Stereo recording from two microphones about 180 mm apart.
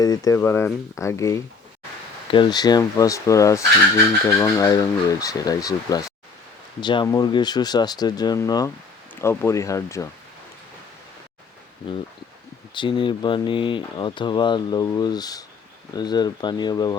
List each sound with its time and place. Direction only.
0.0 s speech: 20° left (ahead or behind)
12.7 s speech: 25° left (ahead or behind)